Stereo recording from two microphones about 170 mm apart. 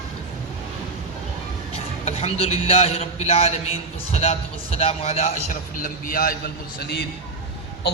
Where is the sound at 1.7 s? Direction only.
35° left (ahead or behind).